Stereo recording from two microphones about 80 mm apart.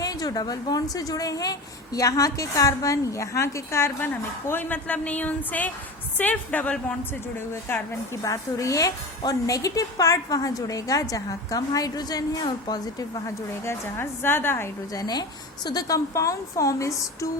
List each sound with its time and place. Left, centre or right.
0.0 s a woman's voice: left
4.0 s speech: left
7.3 s a woman's voice: left
13.7 s speech: left
14.9 s a woman's voice: left